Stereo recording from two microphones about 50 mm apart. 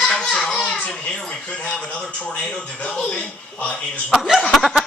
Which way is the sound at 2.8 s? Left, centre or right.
Left.